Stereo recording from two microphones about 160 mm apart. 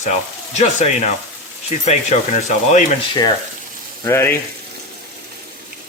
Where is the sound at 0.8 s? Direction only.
50° left (ahead or behind).